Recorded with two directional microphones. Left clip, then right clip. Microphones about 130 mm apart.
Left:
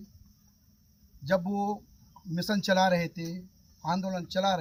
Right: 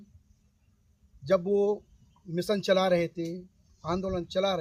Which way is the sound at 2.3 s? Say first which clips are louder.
Right 2 dB; 40° right (ahead or behind).